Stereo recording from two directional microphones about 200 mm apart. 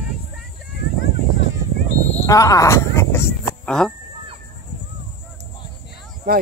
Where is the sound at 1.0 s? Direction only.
65° left (ahead or behind).